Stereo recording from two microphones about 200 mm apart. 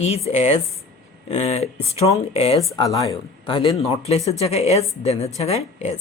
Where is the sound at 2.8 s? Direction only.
15° left (ahead or behind).